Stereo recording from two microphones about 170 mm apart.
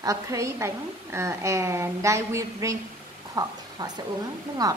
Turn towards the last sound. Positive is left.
turn(degrees=-20)  # may be behind; listen again after turning